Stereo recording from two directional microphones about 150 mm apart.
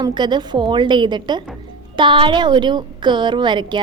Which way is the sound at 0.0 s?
30° right (ahead or behind).